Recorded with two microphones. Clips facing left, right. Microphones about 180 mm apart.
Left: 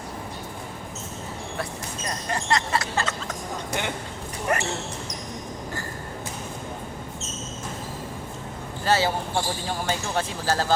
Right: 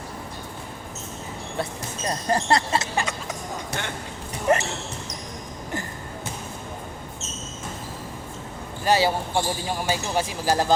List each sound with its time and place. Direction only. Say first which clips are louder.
2.0 s speech: right 5 dB; 35° right (ahead or behind)
2.9 s speech: right 1 dB; 15° right (ahead or behind)
4.5 s speech: right 5 dB; 25° right (ahead or behind)
8.8 s speech: right 2 dB; 15° right (ahead or behind)